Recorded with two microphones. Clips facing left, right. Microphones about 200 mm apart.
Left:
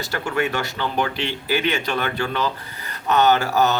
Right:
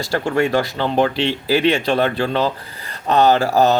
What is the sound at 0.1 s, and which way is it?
Speech, 35° right (ahead or behind).